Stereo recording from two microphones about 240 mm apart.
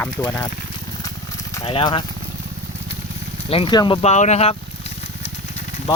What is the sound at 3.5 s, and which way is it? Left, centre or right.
Speech, left.